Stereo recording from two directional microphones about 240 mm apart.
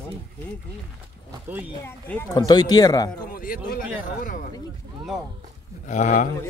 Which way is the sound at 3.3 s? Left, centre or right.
Left.